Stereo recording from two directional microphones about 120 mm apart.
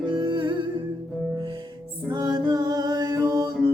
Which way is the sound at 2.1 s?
35° right (ahead or behind).